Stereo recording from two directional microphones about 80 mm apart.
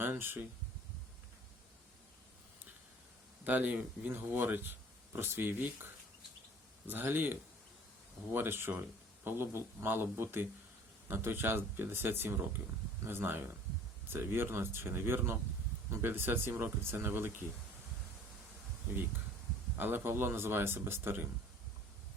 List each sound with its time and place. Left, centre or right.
0.0 s speech: right
3.4 s speech: right
19.7 s speech: right